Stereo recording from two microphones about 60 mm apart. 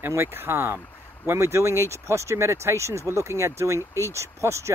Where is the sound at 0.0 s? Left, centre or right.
Right.